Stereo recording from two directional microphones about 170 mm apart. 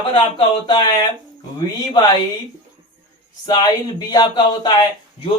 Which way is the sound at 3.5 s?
25° left (ahead or behind).